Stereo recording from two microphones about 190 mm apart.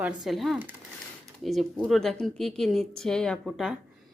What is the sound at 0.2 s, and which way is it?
Speech, centre (ahead or behind).